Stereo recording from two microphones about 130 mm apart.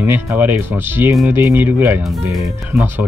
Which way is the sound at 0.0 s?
15° right (ahead or behind).